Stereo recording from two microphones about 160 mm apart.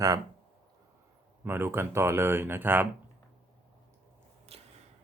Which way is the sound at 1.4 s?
15° right (ahead or behind).